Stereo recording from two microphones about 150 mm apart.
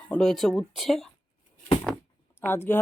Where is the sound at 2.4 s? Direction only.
15° left (ahead or behind).